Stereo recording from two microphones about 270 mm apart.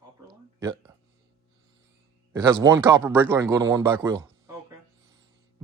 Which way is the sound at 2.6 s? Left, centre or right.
Centre.